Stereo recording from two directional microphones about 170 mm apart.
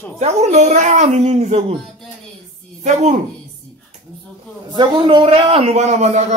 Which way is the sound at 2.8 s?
45° right (ahead or behind).